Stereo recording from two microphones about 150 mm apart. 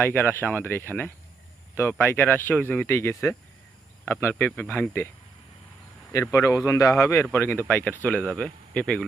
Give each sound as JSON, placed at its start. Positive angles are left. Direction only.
{"t": 0.0, "sound": "speech", "side_deg": 15}
{"t": 6.3, "sound": "speech", "side_deg": 20}